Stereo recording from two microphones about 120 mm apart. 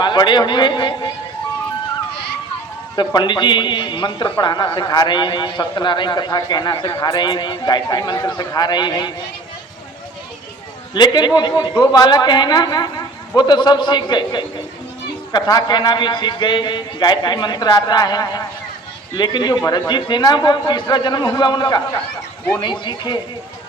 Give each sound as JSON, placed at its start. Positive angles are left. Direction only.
{"t": 0.0, "sound": "a man's voice", "side_deg": 40}
{"t": 2.9, "sound": "a man's voice", "side_deg": 35}
{"t": 10.9, "sound": "a man's voice", "side_deg": 35}